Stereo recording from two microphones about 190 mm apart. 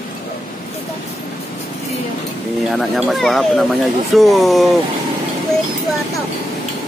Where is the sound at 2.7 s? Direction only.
Centre (ahead or behind).